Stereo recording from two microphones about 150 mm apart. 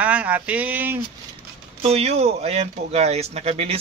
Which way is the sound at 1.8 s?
45° right (ahead or behind).